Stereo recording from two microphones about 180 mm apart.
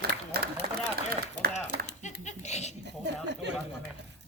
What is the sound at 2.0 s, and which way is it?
Dog, 40° left (ahead or behind).